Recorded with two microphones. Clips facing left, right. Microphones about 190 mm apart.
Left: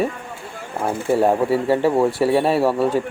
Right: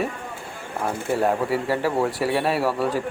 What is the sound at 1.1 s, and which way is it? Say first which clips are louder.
Speech: left 5 dB; 25° left (ahead or behind).